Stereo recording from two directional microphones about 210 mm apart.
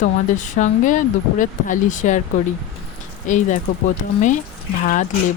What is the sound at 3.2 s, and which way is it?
Speech, 35° left (ahead or behind).